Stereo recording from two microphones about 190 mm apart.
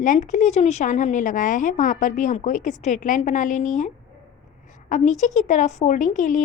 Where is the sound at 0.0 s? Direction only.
40° left (ahead or behind).